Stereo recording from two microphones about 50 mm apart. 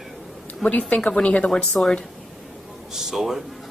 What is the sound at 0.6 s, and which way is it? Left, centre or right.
Speech, left.